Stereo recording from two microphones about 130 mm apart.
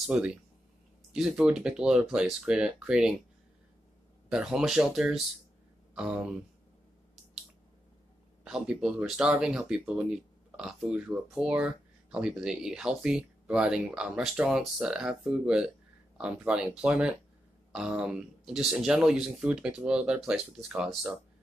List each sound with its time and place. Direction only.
0.0 s speech: 5° right (ahead or behind)
4.3 s speech: 5° right (ahead or behind)
8.5 s speech: 5° right (ahead or behind)